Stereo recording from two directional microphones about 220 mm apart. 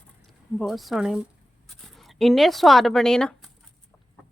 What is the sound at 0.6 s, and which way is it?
A woman's voice, centre (ahead or behind).